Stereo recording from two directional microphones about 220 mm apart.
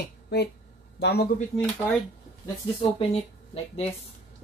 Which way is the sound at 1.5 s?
30° left (ahead or behind).